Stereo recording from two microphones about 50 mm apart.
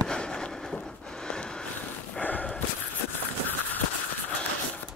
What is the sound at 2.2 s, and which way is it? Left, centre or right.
Snort, left.